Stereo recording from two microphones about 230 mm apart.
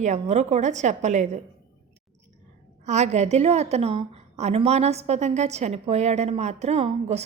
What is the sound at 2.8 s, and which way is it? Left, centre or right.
A woman's voice, right.